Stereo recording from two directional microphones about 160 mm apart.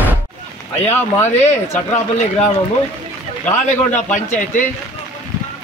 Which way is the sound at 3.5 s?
50° left (ahead or behind).